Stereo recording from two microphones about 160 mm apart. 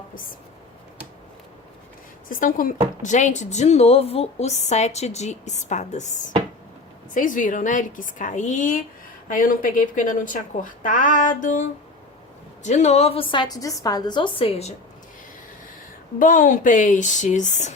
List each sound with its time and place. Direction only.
2.3 s speech: 60° left (ahead or behind)
12.6 s a woman's voice: 45° left (ahead or behind)
16.1 s speech: 55° left (ahead or behind)